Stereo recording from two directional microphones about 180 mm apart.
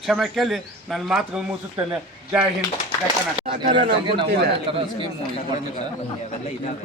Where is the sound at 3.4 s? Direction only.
30° right (ahead or behind).